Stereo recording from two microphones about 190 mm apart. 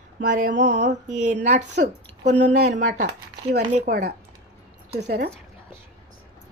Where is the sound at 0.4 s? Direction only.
65° right (ahead or behind).